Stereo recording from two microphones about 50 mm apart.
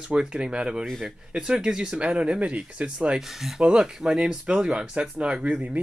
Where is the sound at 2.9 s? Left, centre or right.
Centre.